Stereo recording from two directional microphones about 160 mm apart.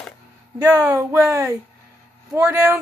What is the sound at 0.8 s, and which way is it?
Speech, 15° right (ahead or behind).